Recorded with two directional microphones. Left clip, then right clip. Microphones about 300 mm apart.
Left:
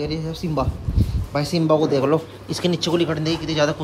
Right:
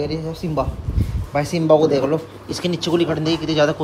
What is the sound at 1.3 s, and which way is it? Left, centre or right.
Speech, centre.